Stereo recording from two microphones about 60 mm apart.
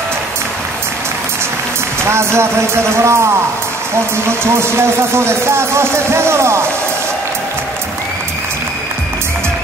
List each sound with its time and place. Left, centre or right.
2.0 s speech: right
4.3 s speech: right